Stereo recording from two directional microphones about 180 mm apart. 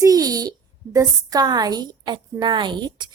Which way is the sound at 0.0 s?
20° right (ahead or behind).